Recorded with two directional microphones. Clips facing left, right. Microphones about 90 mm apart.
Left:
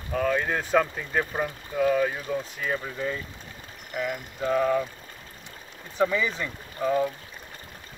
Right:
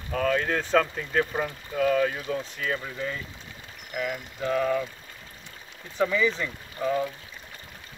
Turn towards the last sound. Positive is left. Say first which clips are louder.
# left 2 dB
turn(degrees=15)  # may be behind; listen again after turning